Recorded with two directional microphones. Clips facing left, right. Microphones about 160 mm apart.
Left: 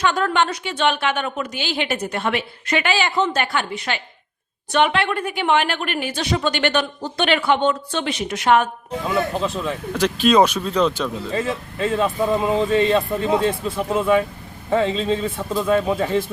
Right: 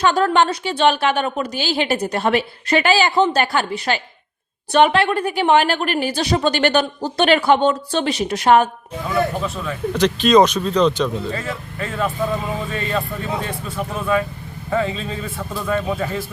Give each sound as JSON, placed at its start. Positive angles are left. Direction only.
{"t": 0.0, "sound": "a woman's voice", "side_deg": -35}
{"t": 9.0, "sound": "speech", "side_deg": 25}
{"t": 9.9, "sound": "speech", "side_deg": 5}
{"t": 11.3, "sound": "speech", "side_deg": 25}